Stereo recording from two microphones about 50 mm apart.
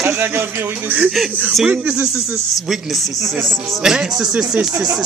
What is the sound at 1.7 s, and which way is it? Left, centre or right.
Speech, right.